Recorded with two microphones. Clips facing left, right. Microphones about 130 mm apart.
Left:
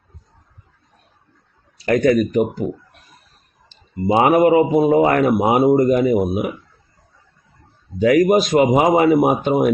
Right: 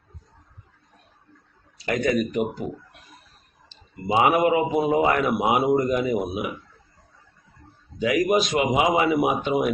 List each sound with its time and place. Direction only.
1.9 s speech: 45° left (ahead or behind)
4.0 s speech: 45° left (ahead or behind)
7.9 s speech: 45° left (ahead or behind)